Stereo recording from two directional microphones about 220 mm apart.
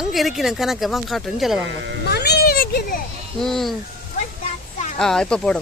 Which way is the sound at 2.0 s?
45° left (ahead or behind).